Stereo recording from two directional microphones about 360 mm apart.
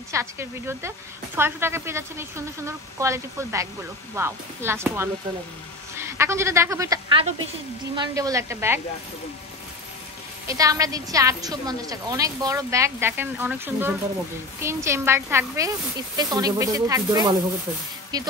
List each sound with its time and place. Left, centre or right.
0.1 s a woman's voice: centre
10.4 s a woman's voice: centre